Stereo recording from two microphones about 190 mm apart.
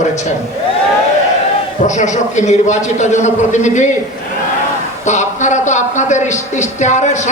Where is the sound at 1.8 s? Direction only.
40° left (ahead or behind).